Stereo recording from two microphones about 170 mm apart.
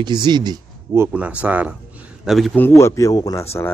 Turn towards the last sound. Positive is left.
turn(degrees=20)  # may be behind; listen again after turning